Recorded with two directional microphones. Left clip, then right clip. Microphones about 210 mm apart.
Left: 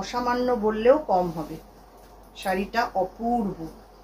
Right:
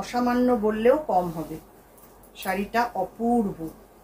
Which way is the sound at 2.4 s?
15° right (ahead or behind).